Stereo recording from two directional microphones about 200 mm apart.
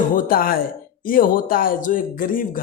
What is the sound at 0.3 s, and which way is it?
A man's voice, 45° left (ahead or behind).